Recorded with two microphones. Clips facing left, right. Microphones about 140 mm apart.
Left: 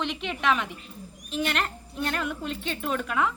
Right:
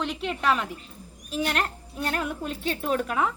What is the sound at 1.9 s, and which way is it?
Speech, 40° right (ahead or behind).